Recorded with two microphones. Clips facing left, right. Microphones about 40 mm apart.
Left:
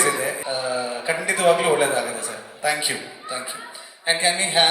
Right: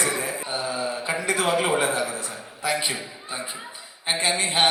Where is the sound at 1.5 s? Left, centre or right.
Left.